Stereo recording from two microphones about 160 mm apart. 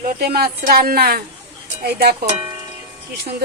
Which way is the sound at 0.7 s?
70° right (ahead or behind).